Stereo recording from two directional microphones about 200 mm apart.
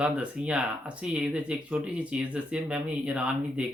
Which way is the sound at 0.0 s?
5° right (ahead or behind).